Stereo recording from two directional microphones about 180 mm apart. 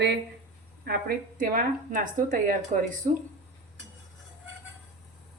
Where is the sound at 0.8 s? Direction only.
60° right (ahead or behind).